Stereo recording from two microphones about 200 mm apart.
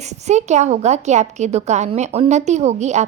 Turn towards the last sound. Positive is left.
turn(degrees=-35)  # may be behind; listen again after turning